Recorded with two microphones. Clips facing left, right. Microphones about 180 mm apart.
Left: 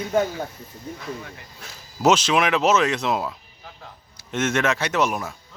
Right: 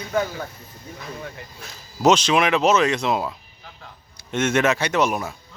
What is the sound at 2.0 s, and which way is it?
Speech, 5° left (ahead or behind).